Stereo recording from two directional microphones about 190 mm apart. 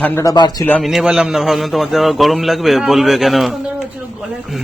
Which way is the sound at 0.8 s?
Centre (ahead or behind).